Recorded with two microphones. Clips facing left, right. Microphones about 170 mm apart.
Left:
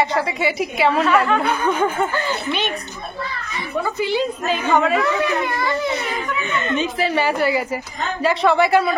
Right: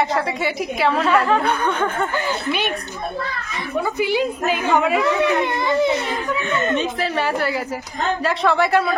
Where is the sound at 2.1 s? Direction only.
15° right (ahead or behind).